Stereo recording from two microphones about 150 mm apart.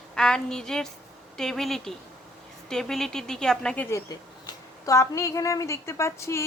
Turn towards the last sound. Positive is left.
turn(degrees=15)  # may be behind; listen again after turning